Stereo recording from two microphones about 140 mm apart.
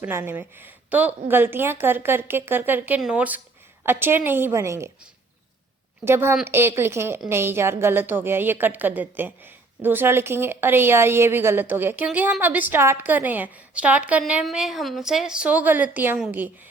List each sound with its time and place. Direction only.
0.0 s a woman's voice: 15° right (ahead or behind)
6.1 s a woman's voice: 15° right (ahead or behind)